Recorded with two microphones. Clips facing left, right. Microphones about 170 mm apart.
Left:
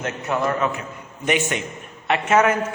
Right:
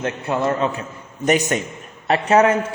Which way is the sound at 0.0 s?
25° right (ahead or behind).